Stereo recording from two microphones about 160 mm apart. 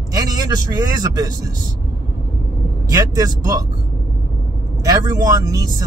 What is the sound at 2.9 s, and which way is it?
Speech, 20° right (ahead or behind).